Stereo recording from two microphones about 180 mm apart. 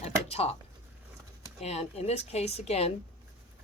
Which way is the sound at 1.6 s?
35° left (ahead or behind).